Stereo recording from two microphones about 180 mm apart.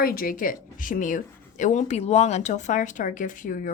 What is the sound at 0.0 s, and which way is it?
Speech, 55° left (ahead or behind).